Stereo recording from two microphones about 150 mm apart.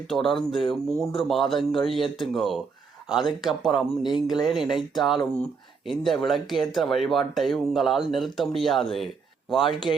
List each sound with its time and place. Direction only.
0.1 s speech: centre (ahead or behind)
4.1 s speech: 30° left (ahead or behind)
4.4 s speech: centre (ahead or behind)